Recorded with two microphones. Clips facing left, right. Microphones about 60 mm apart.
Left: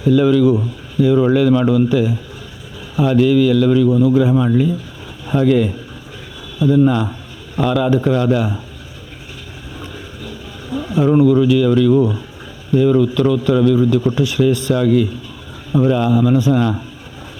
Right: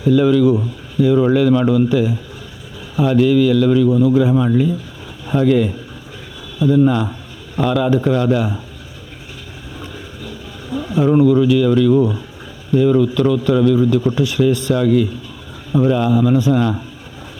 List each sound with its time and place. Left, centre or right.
0.0 s speech: left
9.8 s a sound: left
12.7 s speech: left